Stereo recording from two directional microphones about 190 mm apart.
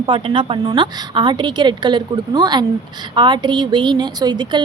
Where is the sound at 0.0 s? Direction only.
25° right (ahead or behind).